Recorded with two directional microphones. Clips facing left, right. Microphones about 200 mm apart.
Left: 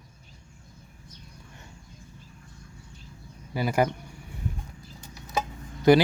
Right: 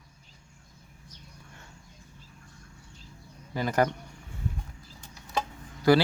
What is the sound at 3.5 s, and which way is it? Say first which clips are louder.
Speech: left 1 dB; 10° left (ahead or behind).